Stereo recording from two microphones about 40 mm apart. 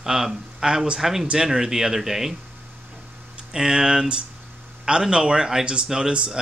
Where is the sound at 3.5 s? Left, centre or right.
Centre.